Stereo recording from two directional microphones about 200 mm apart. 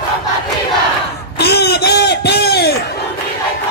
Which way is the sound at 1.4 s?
55° left (ahead or behind).